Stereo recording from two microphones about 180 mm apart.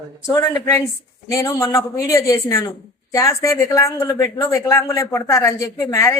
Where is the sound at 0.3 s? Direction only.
15° left (ahead or behind).